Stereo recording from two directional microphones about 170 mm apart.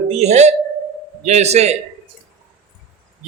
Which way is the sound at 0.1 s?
40° right (ahead or behind).